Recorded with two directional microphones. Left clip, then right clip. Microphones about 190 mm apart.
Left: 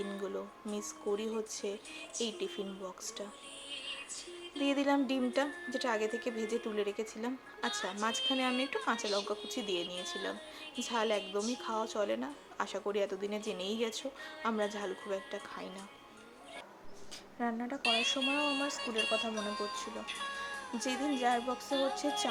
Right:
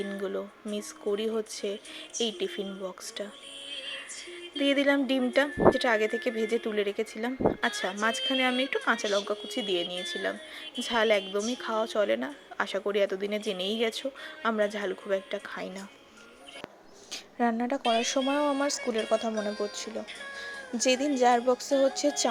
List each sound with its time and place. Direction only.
0.0 s a woman's voice: 25° right (ahead or behind)
4.5 s a woman's voice: 25° right (ahead or behind)
17.1 s a woman's voice: 45° right (ahead or behind)
20.7 s music: 40° right (ahead or behind)